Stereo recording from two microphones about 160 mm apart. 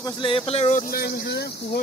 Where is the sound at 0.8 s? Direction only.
75° left (ahead or behind); by 1.5 s 90° left.